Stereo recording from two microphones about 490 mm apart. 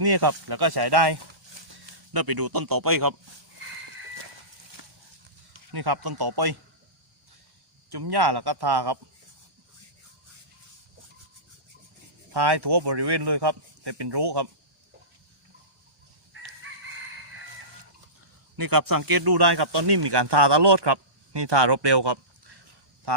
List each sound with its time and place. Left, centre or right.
0.0 s speech: right
5.5 s speech: right
7.9 s speech: right
12.3 s speech: right
18.5 s speech: right